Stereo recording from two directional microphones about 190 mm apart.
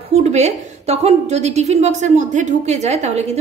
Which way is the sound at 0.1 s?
35° right (ahead or behind).